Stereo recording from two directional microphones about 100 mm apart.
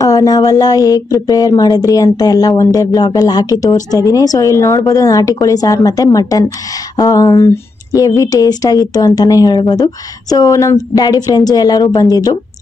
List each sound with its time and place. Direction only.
0.0 s speech: 40° left (ahead or behind)
10.3 s speech: 35° left (ahead or behind)